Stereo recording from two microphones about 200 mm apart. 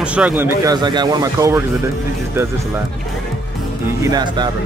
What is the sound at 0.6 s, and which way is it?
Speech, 20° right (ahead or behind).